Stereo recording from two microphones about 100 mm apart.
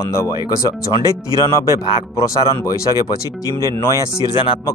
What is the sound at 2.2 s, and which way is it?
Speech, 35° left (ahead or behind).